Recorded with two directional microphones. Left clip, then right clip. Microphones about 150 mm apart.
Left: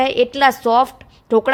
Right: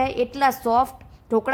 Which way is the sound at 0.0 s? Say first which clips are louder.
Left 6 dB; 25° left (ahead or behind).